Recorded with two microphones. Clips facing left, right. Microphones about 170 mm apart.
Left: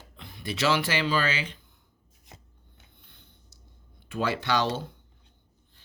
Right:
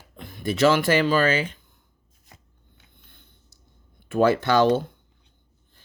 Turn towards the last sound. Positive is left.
turn(degrees=-50)  # may be behind; listen again after turning